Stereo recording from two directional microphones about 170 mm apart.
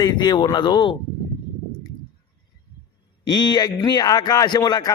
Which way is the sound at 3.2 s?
25° left (ahead or behind).